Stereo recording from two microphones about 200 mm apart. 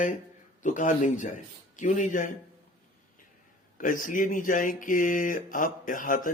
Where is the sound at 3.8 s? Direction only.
40° left (ahead or behind).